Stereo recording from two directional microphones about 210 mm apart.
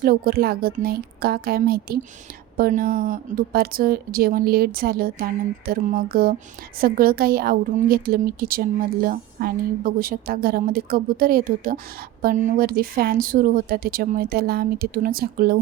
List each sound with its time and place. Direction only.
0.0 s a woman's voice: 45° right (ahead or behind)